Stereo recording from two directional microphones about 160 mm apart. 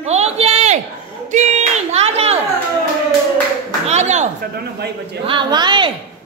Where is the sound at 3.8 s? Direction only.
45° right (ahead or behind).